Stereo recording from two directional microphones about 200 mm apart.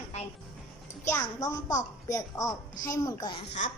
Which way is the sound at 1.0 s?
15° left (ahead or behind).